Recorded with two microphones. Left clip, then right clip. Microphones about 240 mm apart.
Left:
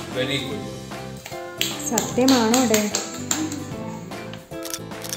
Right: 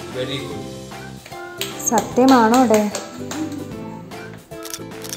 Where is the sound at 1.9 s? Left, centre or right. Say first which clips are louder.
Right 6 dB; centre.